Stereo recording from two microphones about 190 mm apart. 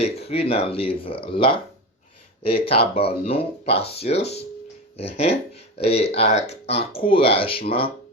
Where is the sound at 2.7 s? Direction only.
30° left (ahead or behind).